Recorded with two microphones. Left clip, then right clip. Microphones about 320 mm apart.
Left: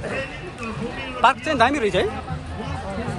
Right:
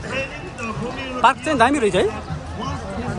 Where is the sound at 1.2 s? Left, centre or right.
Centre.